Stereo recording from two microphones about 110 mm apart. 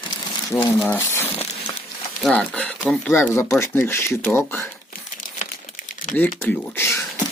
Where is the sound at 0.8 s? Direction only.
25° left (ahead or behind).